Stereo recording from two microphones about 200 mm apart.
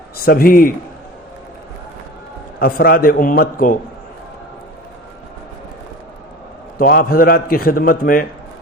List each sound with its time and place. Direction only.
0.3 s a man's voice: 45° left (ahead or behind)
2.6 s a man's voice: 50° left (ahead or behind)
6.7 s a man's voice: 50° left (ahead or behind)